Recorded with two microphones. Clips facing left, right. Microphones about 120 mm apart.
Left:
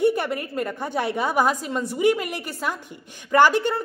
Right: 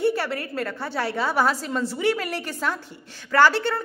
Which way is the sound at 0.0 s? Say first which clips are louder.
Left 2 dB; 20° left (ahead or behind).